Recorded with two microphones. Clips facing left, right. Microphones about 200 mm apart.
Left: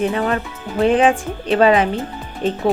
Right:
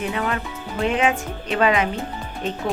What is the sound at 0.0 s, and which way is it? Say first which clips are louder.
Speech: left 6 dB; 35° left (ahead or behind).